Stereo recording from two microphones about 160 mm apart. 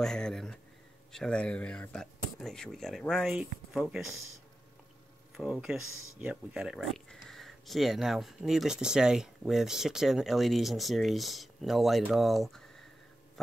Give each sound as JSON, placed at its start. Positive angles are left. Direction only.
{"t": 0.0, "sound": "speech", "side_deg": 5}
{"t": 5.4, "sound": "speech", "side_deg": -5}